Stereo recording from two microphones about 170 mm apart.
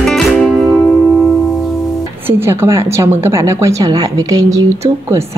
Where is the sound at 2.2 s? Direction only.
15° right (ahead or behind).